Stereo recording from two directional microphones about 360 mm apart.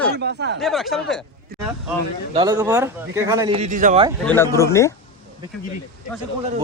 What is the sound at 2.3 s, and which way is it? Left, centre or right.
Speech, centre.